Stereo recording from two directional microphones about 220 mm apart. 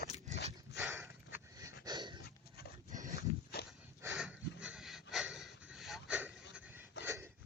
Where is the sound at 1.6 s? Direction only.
20° right (ahead or behind).